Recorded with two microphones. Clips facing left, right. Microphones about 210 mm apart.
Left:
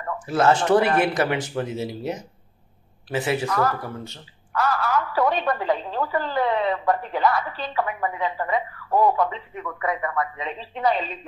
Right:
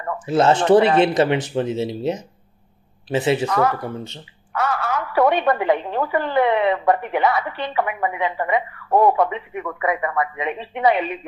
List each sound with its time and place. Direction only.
0.3 s speech: 25° right (ahead or behind)
4.6 s a woman's voice: 60° right (ahead or behind)